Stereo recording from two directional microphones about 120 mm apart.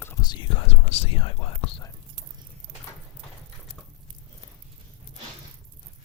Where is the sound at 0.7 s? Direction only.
55° left (ahead or behind).